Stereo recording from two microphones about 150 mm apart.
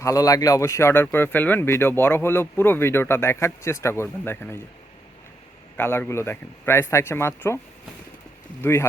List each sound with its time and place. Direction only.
0.0 s speech: 25° left (ahead or behind)
5.7 s speech: 15° left (ahead or behind)
8.6 s speech: 15° left (ahead or behind)